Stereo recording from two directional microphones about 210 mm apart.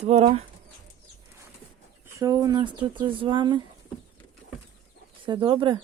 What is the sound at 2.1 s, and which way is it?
Speech, 15° right (ahead or behind).